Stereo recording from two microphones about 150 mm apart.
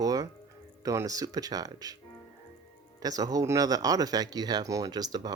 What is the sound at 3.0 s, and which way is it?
Speech, 25° right (ahead or behind).